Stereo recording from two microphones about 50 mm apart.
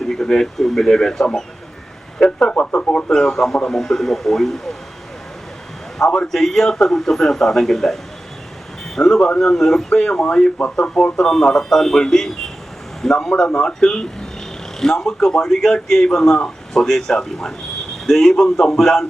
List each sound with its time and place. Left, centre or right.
0.0 s a man's voice: centre
2.1 s a sound: centre
2.5 s speech: left
3.1 s a man's voice: centre
6.0 s a man's voice: centre
9.0 s a man's voice: centre
10.8 s a man's voice: left; by 19.0 s centre